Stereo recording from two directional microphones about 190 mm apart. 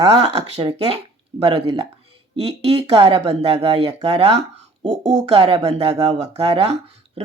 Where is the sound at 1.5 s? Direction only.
30° right (ahead or behind).